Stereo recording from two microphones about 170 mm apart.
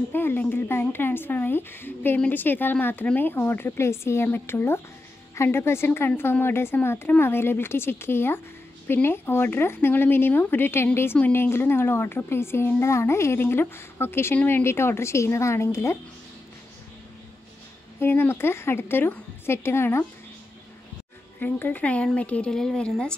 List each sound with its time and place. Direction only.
0.1 s speech: 10° left (ahead or behind)
18.0 s speech: 15° left (ahead or behind)
21.4 s speech: 10° left (ahead or behind)